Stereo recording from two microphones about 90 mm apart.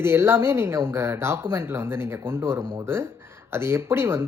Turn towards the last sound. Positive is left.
turn(degrees=-25)  # may be behind; listen again after turning